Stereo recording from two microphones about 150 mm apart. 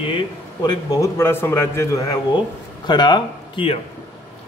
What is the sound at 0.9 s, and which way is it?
Speech, 20° left (ahead or behind).